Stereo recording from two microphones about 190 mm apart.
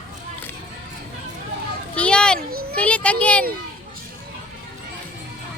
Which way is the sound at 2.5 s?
50° right (ahead or behind).